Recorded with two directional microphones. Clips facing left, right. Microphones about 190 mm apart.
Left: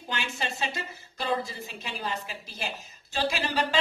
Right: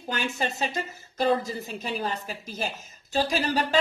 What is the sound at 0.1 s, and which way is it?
A woman's voice, 45° right (ahead or behind).